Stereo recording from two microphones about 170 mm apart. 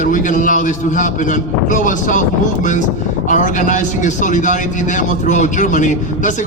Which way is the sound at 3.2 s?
50° left (ahead or behind).